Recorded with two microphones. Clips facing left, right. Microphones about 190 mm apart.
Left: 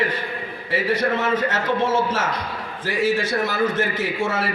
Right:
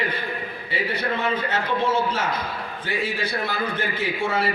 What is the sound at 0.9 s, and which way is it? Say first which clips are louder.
Speech: left 7 dB; 90° left.